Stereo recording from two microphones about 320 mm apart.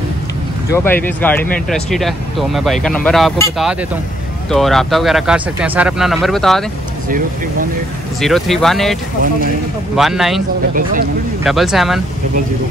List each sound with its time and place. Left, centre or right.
0.7 s speech: centre
8.2 s speech: centre
9.9 s speech: centre
10.7 s speech: right
11.4 s speech: centre